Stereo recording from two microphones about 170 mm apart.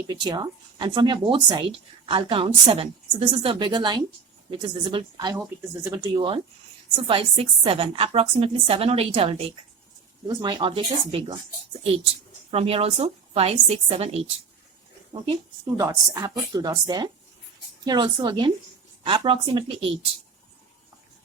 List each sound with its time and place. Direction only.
0.1 s a woman's voice: 25° right (ahead or behind)
12.5 s a woman's voice: 35° right (ahead or behind)
15.8 s a woman's voice: 20° right (ahead or behind)